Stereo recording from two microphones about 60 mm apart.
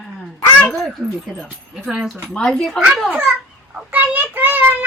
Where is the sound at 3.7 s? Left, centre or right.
Right.